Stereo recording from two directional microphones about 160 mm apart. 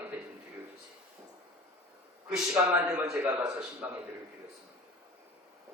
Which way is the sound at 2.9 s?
5° right (ahead or behind).